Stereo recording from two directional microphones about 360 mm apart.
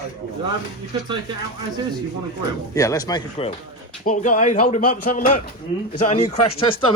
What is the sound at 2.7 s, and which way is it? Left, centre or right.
Speech, centre.